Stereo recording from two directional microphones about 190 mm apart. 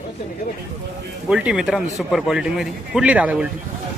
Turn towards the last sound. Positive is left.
turn(degrees=-5)  # may be behind; listen again after turning